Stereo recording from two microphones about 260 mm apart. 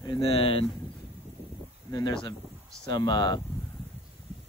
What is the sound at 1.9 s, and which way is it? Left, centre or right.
Speech, centre.